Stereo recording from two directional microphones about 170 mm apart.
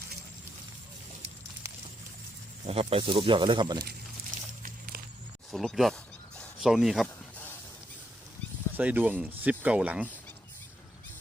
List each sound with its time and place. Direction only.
2.6 s speech: 35° right (ahead or behind)
4.9 s a sound: 60° right (ahead or behind)
5.5 s speech: centre (ahead or behind)
8.7 s speech: 10° right (ahead or behind)